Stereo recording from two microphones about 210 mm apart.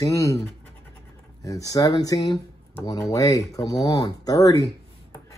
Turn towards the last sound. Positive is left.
turn(degrees=15)  # may be behind; listen again after turning